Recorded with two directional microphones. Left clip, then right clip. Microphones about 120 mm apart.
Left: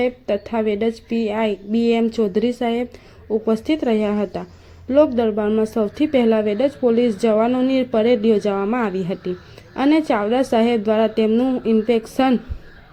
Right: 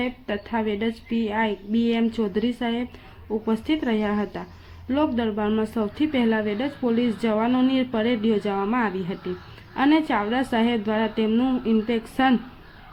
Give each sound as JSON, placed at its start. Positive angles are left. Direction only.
{"t": 0.0, "sound": "a woman's voice", "side_deg": 30}
{"t": 11.3, "sound": "speech", "side_deg": 20}
{"t": 11.6, "sound": "a woman's voice", "side_deg": 35}